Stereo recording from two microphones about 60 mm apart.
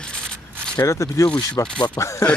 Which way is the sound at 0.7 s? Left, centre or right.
Left.